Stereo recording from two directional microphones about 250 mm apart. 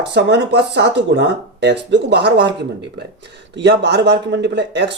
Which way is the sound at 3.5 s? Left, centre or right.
Right.